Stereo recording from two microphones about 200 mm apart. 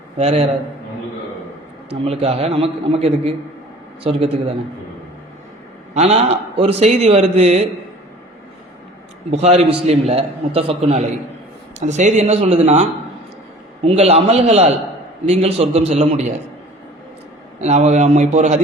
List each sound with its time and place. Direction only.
0.2 s a man's voice: 30° right (ahead or behind)
2.0 s a man's voice: 30° right (ahead or behind)
5.9 s a man's voice: 30° right (ahead or behind)
9.3 s a man's voice: 30° right (ahead or behind)
17.6 s a man's voice: 35° right (ahead or behind)